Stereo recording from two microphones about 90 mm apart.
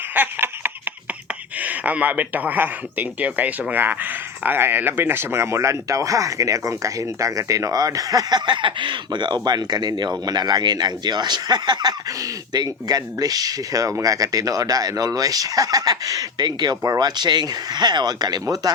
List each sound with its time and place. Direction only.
0.1 s laughter: 20° right (ahead or behind)
1.5 s speech: 15° right (ahead or behind); by 8.4 s 40° right (ahead or behind)
8.4 s speech: 60° right (ahead or behind); by 18.7 s 45° right (ahead or behind)